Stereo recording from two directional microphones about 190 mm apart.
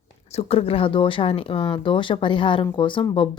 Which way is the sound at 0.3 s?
30° left (ahead or behind).